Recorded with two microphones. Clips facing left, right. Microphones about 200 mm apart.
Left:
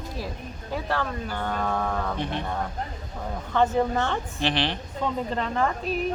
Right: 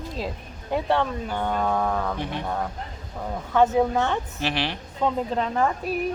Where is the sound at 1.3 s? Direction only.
15° right (ahead or behind).